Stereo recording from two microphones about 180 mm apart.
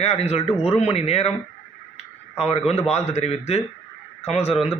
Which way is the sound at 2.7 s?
35° left (ahead or behind).